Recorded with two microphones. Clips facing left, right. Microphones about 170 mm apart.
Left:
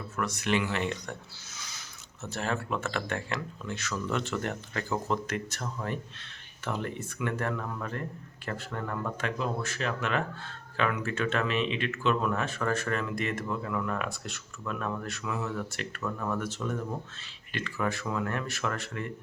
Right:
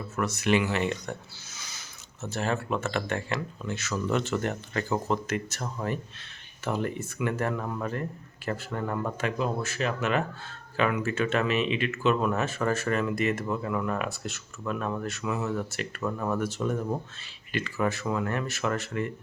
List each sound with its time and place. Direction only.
0.2 s speech: 5° right (ahead or behind)
1.5 s a sound: centre (ahead or behind)
2.2 s speech: centre (ahead or behind)
7.5 s speech: 20° right (ahead or behind)
16.0 s speech: 25° right (ahead or behind); by 19.0 s 5° right (ahead or behind)